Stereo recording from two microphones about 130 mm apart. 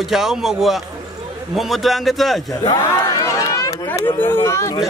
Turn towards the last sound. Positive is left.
turn(degrees=20)  # may be behind; listen again after turning